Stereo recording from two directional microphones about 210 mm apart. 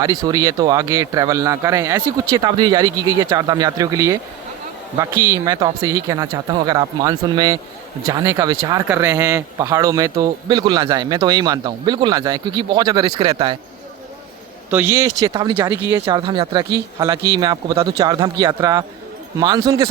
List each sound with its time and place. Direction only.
0.0 s speech: 20° right (ahead or behind)
14.7 s speech: 10° right (ahead or behind)